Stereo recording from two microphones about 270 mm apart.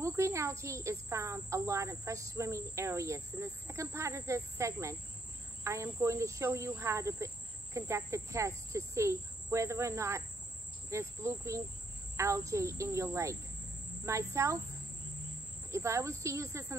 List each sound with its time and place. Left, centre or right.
0.0 s speech: centre
15.7 s speech: centre